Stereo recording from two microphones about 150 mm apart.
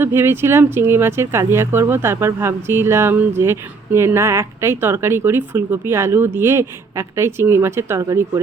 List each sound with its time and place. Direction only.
0.0 s speech: 15° right (ahead or behind)